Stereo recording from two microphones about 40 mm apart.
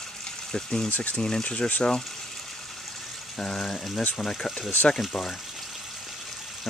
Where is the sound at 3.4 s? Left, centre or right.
Centre.